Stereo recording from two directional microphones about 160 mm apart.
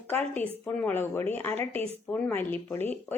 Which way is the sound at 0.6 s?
10° left (ahead or behind).